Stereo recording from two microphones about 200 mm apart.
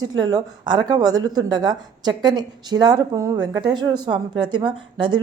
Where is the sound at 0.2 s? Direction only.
20° right (ahead or behind).